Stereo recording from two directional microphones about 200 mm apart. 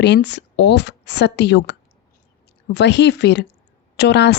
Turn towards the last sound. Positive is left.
turn(degrees=60)  # may be behind; listen again after turning